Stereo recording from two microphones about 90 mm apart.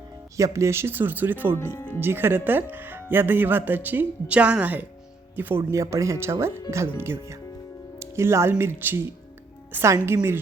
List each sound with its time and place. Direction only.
0.3 s speech: 35° right (ahead or behind)
5.7 s speech: 35° right (ahead or behind)